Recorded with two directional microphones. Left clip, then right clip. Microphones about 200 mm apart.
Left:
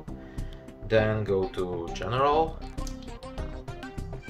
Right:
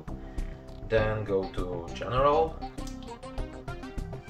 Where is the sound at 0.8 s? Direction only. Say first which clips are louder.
Left 3 dB; 50° left (ahead or behind).